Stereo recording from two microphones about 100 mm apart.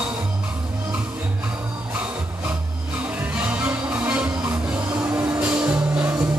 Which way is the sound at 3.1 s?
15° right (ahead or behind).